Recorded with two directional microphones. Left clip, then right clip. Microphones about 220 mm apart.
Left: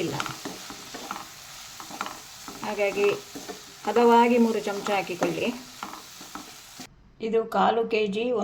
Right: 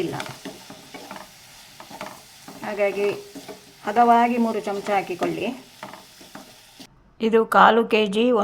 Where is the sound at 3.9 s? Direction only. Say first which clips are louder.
Right 2 dB; centre (ahead or behind).